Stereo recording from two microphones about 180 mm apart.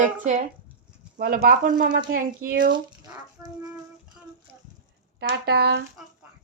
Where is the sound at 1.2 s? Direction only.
55° right (ahead or behind).